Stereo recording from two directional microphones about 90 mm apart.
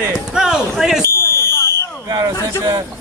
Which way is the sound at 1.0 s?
30° left (ahead or behind).